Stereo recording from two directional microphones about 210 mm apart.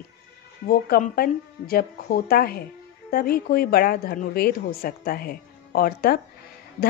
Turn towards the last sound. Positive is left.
turn(degrees=45)  # may be behind; listen again after turning